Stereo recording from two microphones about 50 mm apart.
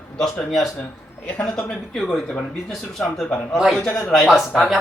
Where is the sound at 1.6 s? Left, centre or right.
Centre.